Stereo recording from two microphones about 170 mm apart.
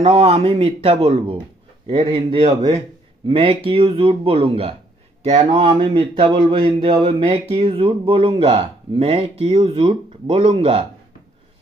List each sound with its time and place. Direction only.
0.0 s speech: 35° right (ahead or behind)